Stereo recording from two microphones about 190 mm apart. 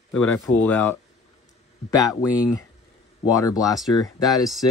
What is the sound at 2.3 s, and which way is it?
Speech, 15° left (ahead or behind).